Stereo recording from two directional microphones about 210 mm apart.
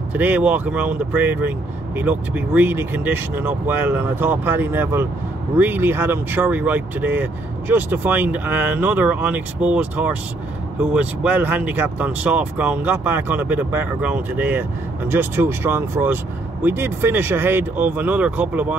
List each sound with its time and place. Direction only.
0.1 s speech: 10° right (ahead or behind)